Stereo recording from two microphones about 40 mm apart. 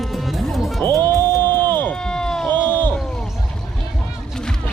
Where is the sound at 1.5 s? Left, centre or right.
Left.